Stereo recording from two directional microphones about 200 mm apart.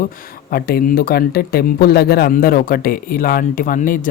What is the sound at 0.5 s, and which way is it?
Speech, 45° left (ahead or behind).